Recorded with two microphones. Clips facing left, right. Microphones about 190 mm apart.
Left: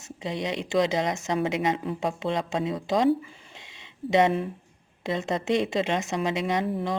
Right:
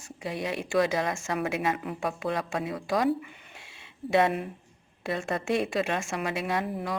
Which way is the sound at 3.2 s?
30° left (ahead or behind).